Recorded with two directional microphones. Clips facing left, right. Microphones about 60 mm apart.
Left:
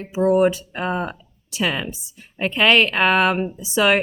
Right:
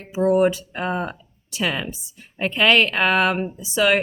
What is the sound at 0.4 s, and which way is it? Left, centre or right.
A woman's voice, left.